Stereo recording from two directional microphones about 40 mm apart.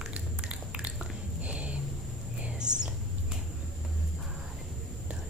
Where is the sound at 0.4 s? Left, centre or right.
Right.